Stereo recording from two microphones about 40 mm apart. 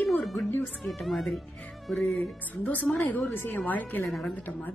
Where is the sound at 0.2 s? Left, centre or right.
Centre.